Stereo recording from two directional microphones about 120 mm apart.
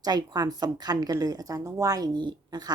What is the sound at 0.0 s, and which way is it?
A woman's voice, 35° right (ahead or behind).